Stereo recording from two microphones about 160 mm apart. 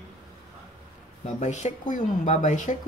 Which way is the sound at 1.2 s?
45° left (ahead or behind).